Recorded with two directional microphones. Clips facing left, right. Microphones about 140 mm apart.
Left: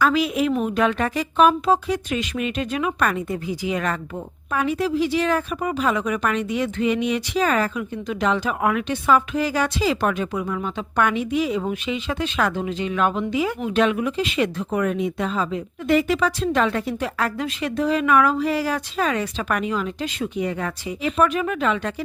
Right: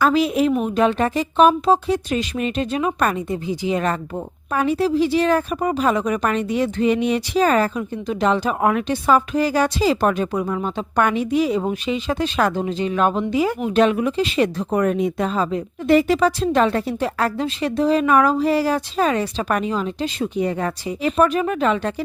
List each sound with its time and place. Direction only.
0.0 s a woman's voice: 35° right (ahead or behind)